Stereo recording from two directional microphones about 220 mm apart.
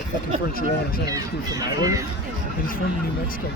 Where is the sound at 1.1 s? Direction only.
15° right (ahead or behind).